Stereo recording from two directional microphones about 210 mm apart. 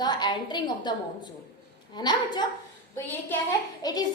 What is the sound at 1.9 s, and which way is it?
Speech, 20° left (ahead or behind).